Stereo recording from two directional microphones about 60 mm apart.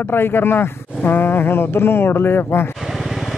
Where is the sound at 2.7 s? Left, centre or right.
Centre.